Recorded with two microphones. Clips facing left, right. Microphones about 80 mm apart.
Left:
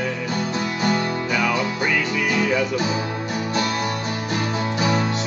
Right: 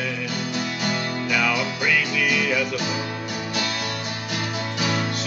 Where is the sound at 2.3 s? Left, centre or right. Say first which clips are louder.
Left 3 dB; left.